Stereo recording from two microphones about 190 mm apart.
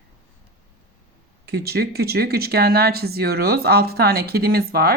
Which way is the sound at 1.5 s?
55° right (ahead or behind).